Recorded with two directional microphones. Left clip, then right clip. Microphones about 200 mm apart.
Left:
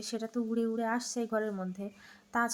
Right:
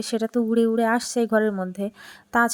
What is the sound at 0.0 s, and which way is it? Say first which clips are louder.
A woman's voice: right 12 dB; 35° right (ahead or behind).